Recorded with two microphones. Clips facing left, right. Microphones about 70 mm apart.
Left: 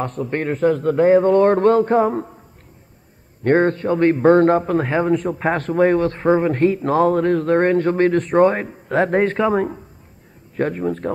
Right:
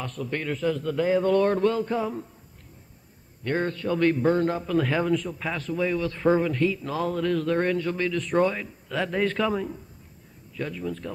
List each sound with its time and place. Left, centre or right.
0.0 s a man's voice: left
3.4 s a man's voice: left